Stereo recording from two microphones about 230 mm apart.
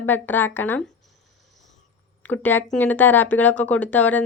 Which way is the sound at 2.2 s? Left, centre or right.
Centre.